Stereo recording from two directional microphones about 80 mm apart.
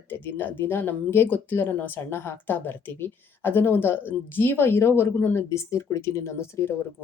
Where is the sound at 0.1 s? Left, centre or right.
Left.